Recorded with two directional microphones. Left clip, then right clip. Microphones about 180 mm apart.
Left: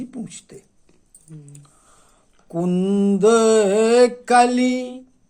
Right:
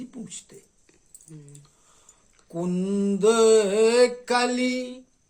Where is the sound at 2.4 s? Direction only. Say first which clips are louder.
Left 7 dB; 20° left (ahead or behind).